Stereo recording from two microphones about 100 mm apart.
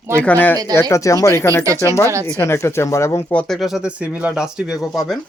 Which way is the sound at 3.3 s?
5° left (ahead or behind).